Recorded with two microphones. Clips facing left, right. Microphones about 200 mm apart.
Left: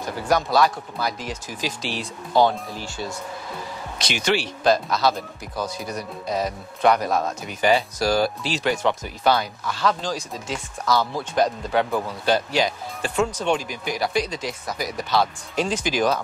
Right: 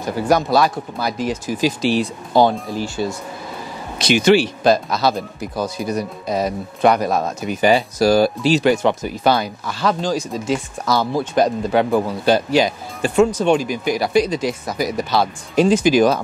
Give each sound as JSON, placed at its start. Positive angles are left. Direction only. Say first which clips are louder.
{"t": 0.5, "sound": "speech", "louder": "right 3 dB", "side_deg": -10}
{"t": 10.9, "sound": "speech", "louder": "right 4 dB", "side_deg": -35}
{"t": 11.3, "sound": "speech", "louder": "right 4 dB", "side_deg": -10}